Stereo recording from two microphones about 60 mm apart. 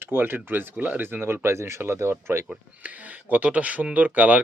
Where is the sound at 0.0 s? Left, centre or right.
Right.